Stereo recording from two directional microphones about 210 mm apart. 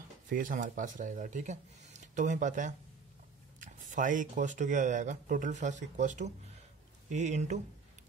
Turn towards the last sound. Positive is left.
turn(degrees=-35)  # may be behind; listen again after turning